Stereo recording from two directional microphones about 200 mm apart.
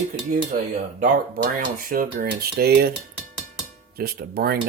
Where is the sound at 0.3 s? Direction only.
45° right (ahead or behind).